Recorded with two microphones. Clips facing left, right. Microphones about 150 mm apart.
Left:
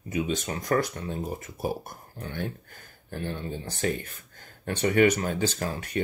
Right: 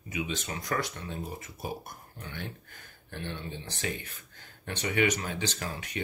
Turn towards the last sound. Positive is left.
turn(degrees=50)  # may be behind; listen again after turning